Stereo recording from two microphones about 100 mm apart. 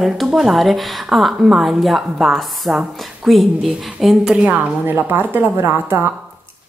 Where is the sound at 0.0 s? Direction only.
Centre (ahead or behind).